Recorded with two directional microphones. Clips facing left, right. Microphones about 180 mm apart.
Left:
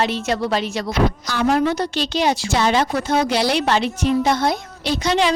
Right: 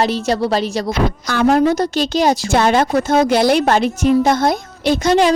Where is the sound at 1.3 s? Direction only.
50° right (ahead or behind).